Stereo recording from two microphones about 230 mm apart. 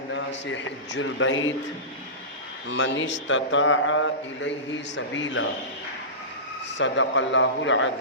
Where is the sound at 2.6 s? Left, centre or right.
Left.